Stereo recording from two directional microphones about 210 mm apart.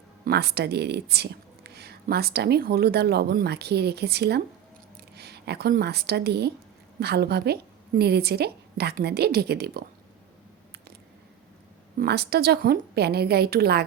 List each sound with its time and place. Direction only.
0.3 s speech: 50° right (ahead or behind)
11.9 s speech: 50° right (ahead or behind)